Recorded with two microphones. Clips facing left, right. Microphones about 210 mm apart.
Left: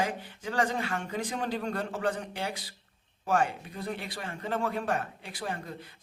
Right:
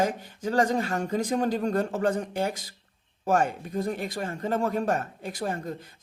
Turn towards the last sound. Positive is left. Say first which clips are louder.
# right 5 dB
turn(degrees=-45)  # may be behind; listen again after turning